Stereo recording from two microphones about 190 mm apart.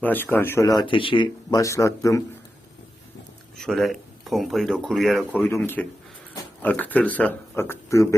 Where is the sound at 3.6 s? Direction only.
Centre (ahead or behind).